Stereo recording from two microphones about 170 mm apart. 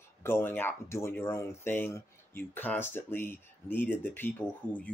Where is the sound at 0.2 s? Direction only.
15° left (ahead or behind).